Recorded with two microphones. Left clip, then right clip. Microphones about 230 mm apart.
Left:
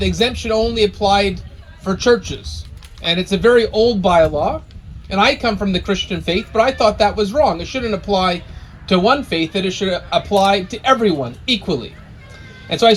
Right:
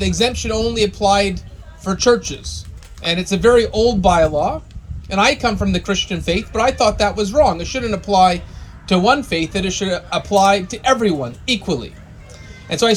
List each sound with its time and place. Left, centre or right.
0.0 s speech: right